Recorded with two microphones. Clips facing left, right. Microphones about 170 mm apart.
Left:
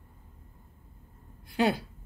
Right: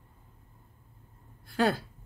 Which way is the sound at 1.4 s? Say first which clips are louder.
Even; 20° left (ahead or behind).